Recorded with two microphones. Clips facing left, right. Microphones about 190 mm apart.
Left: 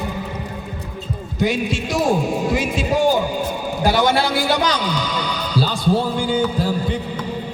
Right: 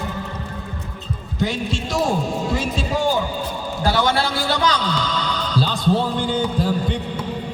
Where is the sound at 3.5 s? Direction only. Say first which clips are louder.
Left 2 dB; 15° left (ahead or behind).